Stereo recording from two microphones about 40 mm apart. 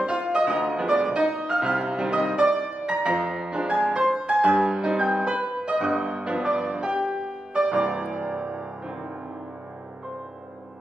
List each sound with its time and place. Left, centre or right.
0.3 s music: right